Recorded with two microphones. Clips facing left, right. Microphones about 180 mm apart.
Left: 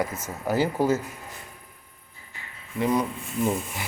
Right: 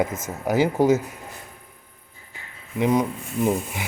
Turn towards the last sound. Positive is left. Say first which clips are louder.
# right 3 dB
turn(degrees=-15)  # may be behind; listen again after turning